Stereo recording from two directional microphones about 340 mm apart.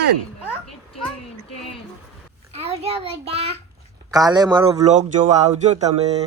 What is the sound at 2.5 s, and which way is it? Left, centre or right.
Speech, centre.